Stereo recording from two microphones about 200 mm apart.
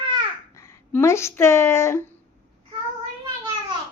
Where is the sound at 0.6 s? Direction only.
15° left (ahead or behind).